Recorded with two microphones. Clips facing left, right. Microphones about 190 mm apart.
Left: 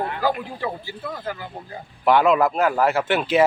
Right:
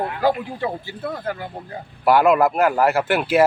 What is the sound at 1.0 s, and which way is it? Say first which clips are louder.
Speech: right 5 dB; 55° right (ahead or behind).